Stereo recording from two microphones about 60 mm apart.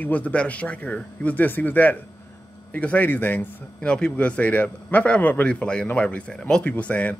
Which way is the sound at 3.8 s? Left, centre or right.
Centre.